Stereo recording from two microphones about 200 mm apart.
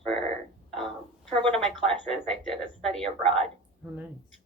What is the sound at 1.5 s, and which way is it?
Speech, 5° left (ahead or behind).